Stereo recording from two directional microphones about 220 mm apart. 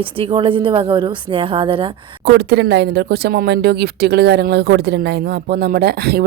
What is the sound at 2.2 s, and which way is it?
Speech, 50° right (ahead or behind).